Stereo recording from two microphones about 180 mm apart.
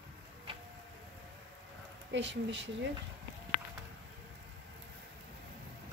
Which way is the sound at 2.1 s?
90° right.